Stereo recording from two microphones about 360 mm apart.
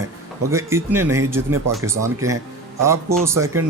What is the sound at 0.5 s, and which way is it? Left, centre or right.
Speech, centre.